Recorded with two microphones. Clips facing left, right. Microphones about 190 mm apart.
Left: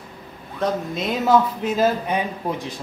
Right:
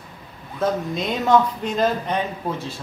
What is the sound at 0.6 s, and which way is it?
Speech, centre (ahead or behind).